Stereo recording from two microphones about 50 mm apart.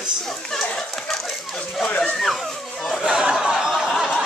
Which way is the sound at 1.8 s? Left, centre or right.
Left.